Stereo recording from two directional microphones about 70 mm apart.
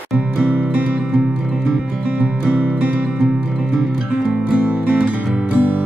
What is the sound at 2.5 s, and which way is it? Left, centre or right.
Music, centre.